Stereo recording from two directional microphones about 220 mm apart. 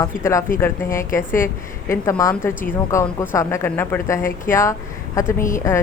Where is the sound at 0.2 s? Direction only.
10° left (ahead or behind).